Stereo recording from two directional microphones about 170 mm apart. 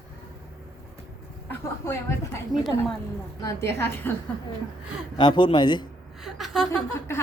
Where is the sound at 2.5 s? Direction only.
25° right (ahead or behind).